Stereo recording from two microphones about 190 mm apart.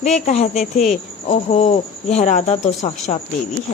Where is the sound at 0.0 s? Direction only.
35° left (ahead or behind).